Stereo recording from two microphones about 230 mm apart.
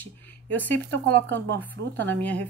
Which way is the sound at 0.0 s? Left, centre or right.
Centre.